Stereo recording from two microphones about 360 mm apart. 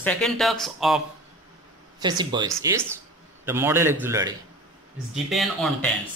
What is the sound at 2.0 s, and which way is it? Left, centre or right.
A man's voice, centre.